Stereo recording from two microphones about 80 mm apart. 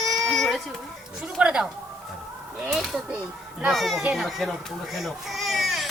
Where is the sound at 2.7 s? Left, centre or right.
Centre.